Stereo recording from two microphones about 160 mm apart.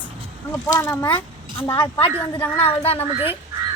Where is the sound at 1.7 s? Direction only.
35° left (ahead or behind).